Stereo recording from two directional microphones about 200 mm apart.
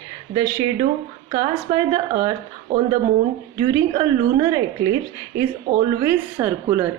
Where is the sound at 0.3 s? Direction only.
20° right (ahead or behind).